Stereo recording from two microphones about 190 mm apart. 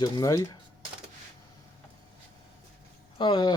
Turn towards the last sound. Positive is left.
turn(degrees=25)  # may be behind; listen again after turning